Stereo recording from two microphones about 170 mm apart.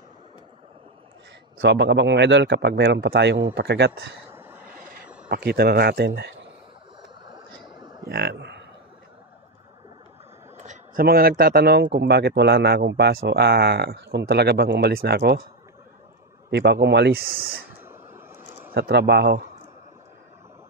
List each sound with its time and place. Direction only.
1.6 s speech: 90° right
4.3 s vehicle: 10° right (ahead or behind)
5.3 s speech: 70° right (ahead or behind)
8.0 s speech: 70° right (ahead or behind)
10.6 s a sound: 45° right (ahead or behind)
11.1 s speech: 65° right (ahead or behind)
16.4 s speech: 80° right; by 17.4 s 60° right (ahead or behind)
17.8 s a sound: 15° right (ahead or behind)
18.7 s speech: 75° right (ahead or behind)